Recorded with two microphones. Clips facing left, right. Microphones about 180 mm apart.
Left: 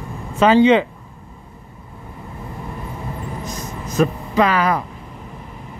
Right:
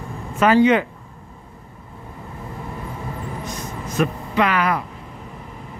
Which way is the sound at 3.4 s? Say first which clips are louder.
Left 1 dB; 40° left (ahead or behind).